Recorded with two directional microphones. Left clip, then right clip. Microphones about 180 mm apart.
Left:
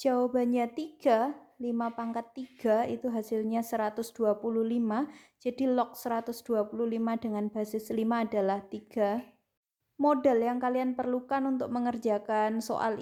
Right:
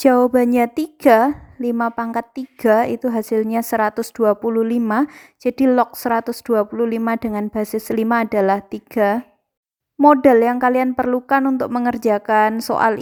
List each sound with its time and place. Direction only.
0.0 s a woman's voice: 45° right (ahead or behind)